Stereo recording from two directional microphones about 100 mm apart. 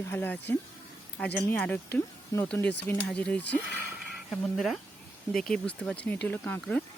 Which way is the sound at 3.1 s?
10° left (ahead or behind).